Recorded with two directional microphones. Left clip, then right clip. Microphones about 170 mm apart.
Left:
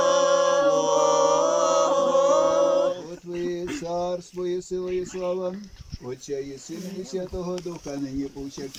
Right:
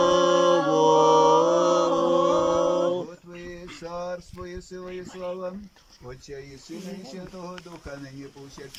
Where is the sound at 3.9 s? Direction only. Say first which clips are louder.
Left 4 dB; 25° left (ahead or behind).